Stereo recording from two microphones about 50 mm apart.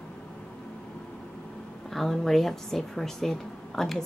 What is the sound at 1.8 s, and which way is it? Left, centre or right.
Speech, centre.